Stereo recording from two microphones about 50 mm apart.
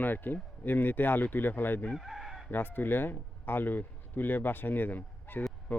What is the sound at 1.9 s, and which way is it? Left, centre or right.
Chicken, centre.